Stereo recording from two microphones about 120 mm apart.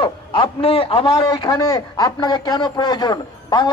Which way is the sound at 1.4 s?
30° left (ahead or behind).